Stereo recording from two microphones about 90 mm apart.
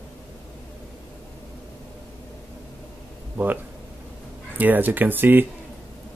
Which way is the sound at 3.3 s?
20° right (ahead or behind).